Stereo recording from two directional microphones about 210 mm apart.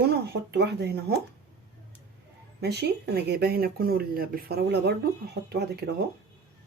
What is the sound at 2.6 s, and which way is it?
Speech, 50° right (ahead or behind).